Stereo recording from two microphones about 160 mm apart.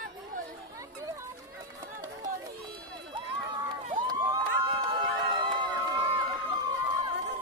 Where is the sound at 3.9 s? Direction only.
30° right (ahead or behind).